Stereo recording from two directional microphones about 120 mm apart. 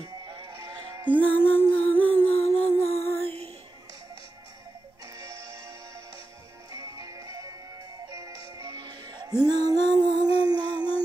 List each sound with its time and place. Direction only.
0.0 s music: 35° right (ahead or behind)
1.2 s humming: 15° left (ahead or behind)
2.5 s music: 15° left (ahead or behind)
5.1 s music: 25° right (ahead or behind)
6.7 s music: 30° right (ahead or behind)
10.3 s a sound: 50° left (ahead or behind)